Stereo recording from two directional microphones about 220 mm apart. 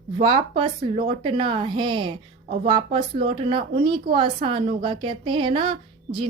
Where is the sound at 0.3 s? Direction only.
20° right (ahead or behind).